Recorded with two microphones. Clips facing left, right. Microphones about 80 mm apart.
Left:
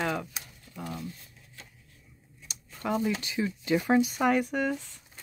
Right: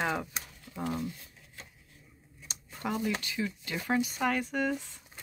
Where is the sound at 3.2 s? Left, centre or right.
Centre.